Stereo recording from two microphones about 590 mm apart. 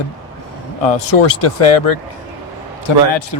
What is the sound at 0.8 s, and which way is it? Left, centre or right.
Speech, left.